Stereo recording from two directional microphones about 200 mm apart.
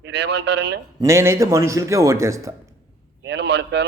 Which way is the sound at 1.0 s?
15° right (ahead or behind).